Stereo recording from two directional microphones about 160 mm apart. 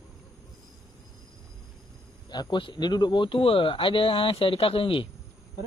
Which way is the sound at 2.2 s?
30° left (ahead or behind).